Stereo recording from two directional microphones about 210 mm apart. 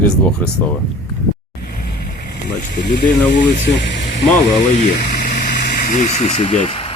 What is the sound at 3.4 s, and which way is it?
Speech, 60° left (ahead or behind).